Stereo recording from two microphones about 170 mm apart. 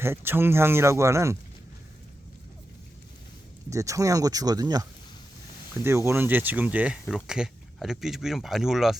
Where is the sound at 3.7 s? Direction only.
20° right (ahead or behind).